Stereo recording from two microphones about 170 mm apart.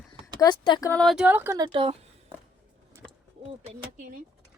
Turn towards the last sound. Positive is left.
turn(degrees=-50)  # may be behind; listen again after turning